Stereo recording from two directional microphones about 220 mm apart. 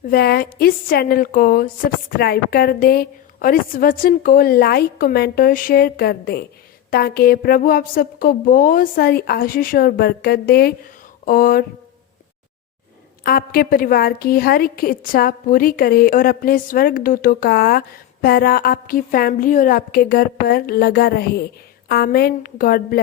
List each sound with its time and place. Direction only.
0.0 s a woman's voice: 45° left (ahead or behind)
13.2 s a woman's voice: 40° left (ahead or behind)